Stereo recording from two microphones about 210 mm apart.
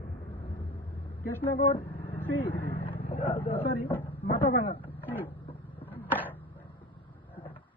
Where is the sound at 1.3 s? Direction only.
10° left (ahead or behind).